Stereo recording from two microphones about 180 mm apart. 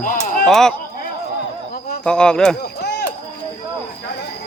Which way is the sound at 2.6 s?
65° left (ahead or behind).